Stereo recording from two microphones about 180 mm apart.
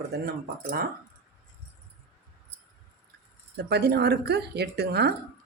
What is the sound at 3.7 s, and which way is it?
Speech, 65° right (ahead or behind).